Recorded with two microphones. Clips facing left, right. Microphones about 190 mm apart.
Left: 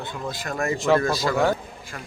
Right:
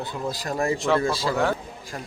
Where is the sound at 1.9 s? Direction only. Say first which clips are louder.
Right 3 dB; 25° right (ahead or behind).